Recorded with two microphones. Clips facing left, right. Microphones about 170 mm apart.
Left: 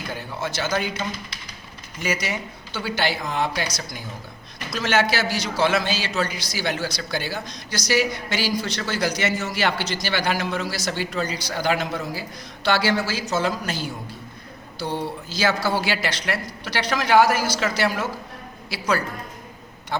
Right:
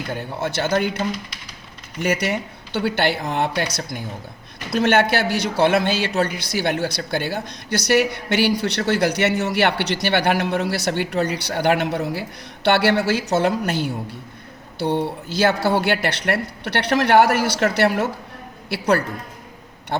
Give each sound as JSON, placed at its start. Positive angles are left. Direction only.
{"t": 0.1, "sound": "a man's voice", "side_deg": -60}
{"t": 2.0, "sound": "a man's voice", "side_deg": -60}